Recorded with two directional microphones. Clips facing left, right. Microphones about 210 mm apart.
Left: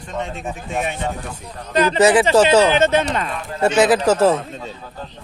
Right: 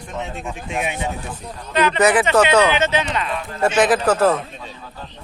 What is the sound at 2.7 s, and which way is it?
Speech, 55° left (ahead or behind).